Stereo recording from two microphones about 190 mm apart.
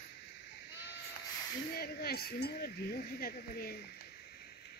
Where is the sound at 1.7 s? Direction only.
55° left (ahead or behind).